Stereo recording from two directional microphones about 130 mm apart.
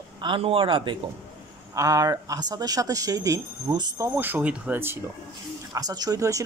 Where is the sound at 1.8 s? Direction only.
30° right (ahead or behind).